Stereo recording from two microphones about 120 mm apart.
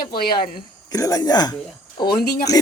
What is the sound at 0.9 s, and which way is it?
Speech, 30° left (ahead or behind).